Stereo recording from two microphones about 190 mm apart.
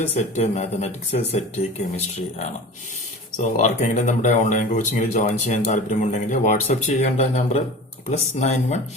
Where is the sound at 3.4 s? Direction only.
40° left (ahead or behind).